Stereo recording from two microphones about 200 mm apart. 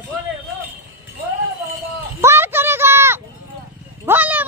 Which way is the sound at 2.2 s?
10° right (ahead or behind).